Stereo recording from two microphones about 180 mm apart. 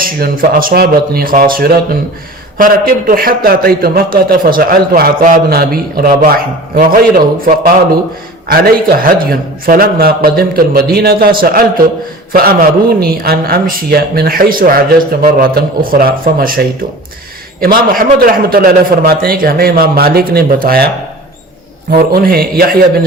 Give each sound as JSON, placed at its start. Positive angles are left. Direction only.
{"t": 0.0, "sound": "a man's voice", "side_deg": -55}